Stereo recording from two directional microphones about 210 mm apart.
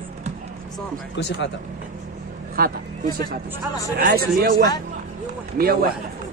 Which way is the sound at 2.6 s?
45° right (ahead or behind).